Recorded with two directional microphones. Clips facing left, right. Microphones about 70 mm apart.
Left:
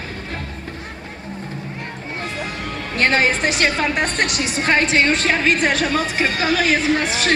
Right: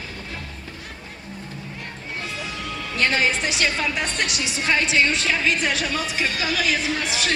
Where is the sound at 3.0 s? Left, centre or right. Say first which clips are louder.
Left 4 dB; left.